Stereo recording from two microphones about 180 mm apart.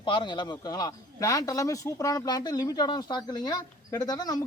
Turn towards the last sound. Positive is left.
turn(degrees=20)  # may be behind; listen again after turning